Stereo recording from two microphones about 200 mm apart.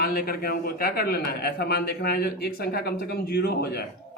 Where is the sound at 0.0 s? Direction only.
50° left (ahead or behind).